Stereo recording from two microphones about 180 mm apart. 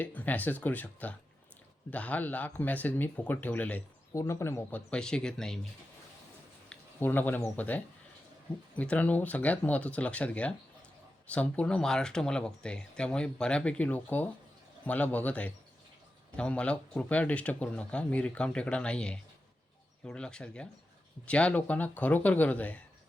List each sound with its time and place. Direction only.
0.0 s speech: 10° left (ahead or behind)
6.7 s speech: 10° left (ahead or behind)